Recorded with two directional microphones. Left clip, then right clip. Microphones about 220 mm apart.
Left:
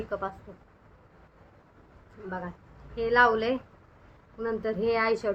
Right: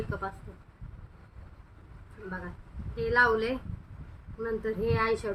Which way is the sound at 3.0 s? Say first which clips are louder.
Left 2 dB; 15° right (ahead or behind).